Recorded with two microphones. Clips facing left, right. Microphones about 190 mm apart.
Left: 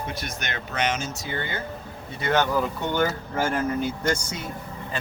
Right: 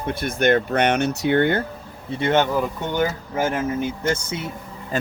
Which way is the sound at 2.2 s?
25° right (ahead or behind).